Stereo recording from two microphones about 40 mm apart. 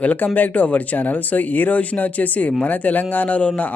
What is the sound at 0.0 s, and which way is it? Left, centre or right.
A man's voice, left.